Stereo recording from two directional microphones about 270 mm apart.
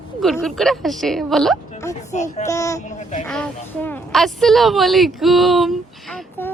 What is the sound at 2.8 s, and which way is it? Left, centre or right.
Speech, left.